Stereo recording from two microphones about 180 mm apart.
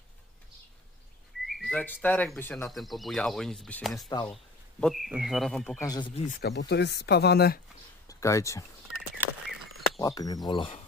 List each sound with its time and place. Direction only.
1.5 s speech: 5° left (ahead or behind)
2.7 s speech: centre (ahead or behind)
4.1 s speech: 25° left (ahead or behind)
4.7 s speech: centre (ahead or behind)
5.8 s speech: 25° left (ahead or behind)
6.4 s speech: 70° left (ahead or behind)
8.1 s speech: 15° left (ahead or behind)
9.2 s a sound: centre (ahead or behind)
9.9 s speech: 20° left (ahead or behind)